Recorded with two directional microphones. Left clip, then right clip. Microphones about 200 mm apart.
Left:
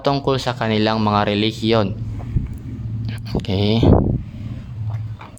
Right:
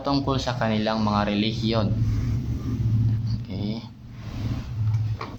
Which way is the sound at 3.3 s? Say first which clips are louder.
Left 13 dB; 55° left (ahead or behind).